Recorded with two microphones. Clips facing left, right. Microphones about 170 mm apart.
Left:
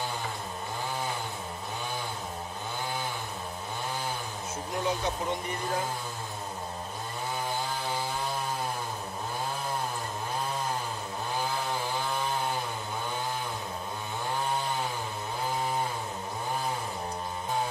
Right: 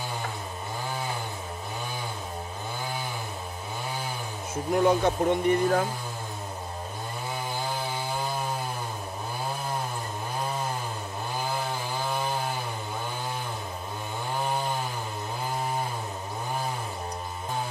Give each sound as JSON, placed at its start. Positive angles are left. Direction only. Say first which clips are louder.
{"t": 4.7, "sound": "speech", "louder": "right 8 dB", "side_deg": -55}